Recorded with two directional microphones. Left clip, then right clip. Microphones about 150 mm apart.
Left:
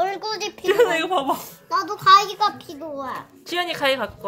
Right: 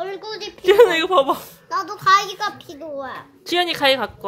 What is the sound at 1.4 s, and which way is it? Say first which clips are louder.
A child's voice: left 1 dB; centre (ahead or behind).